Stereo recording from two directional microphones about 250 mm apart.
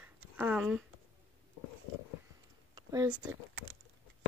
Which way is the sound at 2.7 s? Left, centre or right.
Centre.